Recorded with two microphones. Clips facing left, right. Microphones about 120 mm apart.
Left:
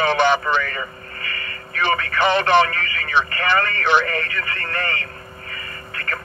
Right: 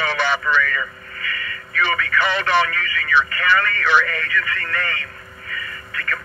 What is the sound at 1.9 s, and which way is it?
Speech, 50° left (ahead or behind).